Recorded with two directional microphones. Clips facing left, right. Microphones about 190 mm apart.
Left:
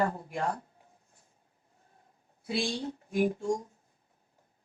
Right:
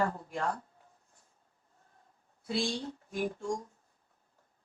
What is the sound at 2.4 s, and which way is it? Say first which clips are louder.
A woman's voice: left 1 dB; 15° left (ahead or behind).